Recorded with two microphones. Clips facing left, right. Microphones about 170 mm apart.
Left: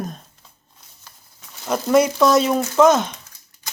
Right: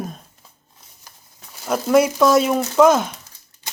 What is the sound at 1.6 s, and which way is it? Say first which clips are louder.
Speech: right 1 dB; 5° right (ahead or behind).